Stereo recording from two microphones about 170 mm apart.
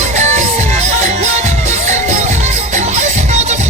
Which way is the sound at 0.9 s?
45° right (ahead or behind).